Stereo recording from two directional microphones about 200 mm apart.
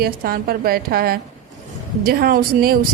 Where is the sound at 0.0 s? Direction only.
50° right (ahead or behind).